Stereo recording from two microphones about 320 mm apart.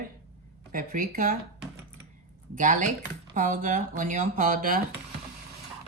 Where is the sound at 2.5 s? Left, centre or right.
Right.